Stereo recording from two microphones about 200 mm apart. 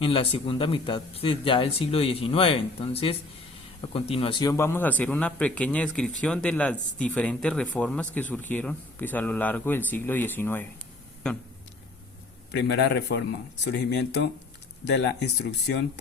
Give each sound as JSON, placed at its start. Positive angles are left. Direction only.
{"t": 0.0, "sound": "speech", "side_deg": 25}
{"t": 12.5, "sound": "speech", "side_deg": 60}